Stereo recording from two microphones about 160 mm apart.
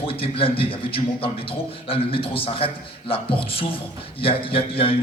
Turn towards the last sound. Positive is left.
turn(degrees=35)  # may be behind; listen again after turning